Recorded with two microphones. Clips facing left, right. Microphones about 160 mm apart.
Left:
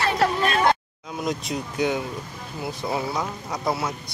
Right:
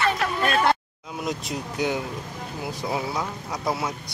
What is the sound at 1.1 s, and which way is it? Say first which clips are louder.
Speech: left 2 dB; 5° right (ahead or behind).